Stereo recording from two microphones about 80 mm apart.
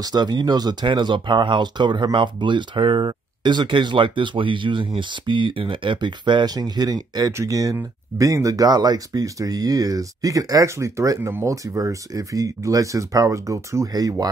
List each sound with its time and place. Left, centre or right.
0.0 s speech: right
2.1 s speech: right
7.3 s speech: right